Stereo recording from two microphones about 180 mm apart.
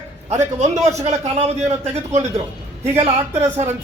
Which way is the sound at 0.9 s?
35° right (ahead or behind).